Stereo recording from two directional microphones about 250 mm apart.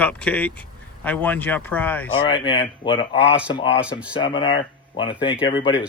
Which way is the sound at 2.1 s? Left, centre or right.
Left.